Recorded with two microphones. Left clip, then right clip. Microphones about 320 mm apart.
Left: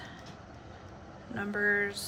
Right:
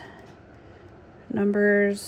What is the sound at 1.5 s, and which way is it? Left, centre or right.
Speech, right.